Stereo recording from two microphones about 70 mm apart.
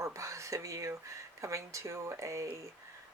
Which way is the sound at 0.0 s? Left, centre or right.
Right.